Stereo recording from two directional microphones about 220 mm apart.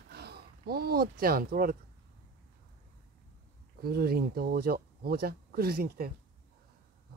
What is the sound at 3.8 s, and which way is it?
Speech, 45° right (ahead or behind).